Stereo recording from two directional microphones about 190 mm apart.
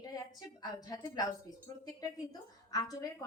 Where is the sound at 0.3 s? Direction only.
20° left (ahead or behind).